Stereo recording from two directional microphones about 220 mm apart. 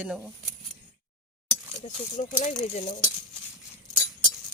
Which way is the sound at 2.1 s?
35° left (ahead or behind).